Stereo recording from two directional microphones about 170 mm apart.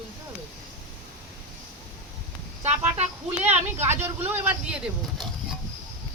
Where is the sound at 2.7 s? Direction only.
40° right (ahead or behind).